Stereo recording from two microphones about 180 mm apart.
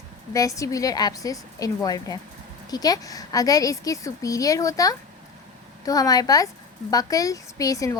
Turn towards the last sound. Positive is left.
turn(degrees=20)  # may be behind; listen again after turning